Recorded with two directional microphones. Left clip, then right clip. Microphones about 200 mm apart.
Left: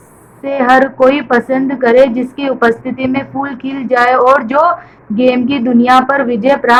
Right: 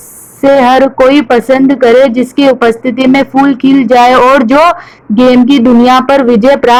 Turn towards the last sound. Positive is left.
turn(degrees=-50)  # may be behind; listen again after turning